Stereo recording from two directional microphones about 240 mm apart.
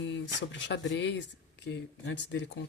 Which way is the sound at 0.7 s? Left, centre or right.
Left.